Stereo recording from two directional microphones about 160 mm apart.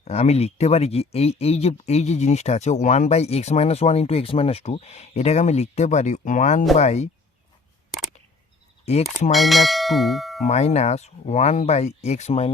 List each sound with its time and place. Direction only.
0.0 s speech: 40° left (ahead or behind)
7.9 s a sound: centre (ahead or behind)
8.8 s speech: 40° left (ahead or behind)
9.3 s bell: centre (ahead or behind)
10.4 s speech: 45° left (ahead or behind)